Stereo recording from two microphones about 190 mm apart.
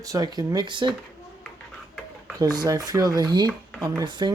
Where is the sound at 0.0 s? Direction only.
20° right (ahead or behind).